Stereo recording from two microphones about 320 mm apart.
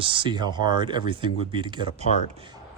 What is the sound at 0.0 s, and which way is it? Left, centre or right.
Speech, centre.